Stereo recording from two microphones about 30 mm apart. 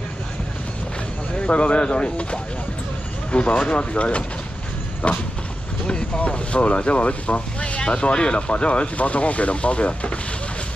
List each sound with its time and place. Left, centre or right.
1.4 s speech: left